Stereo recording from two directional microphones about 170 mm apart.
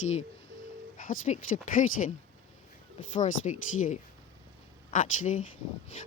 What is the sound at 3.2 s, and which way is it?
Speech, 45° left (ahead or behind).